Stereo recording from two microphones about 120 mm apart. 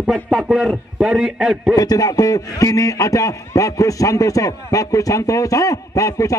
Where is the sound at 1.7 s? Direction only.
30° left (ahead or behind).